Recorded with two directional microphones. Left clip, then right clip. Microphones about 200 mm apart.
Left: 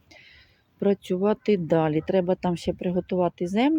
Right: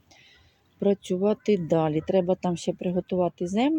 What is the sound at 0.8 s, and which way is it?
Speech, 5° left (ahead or behind).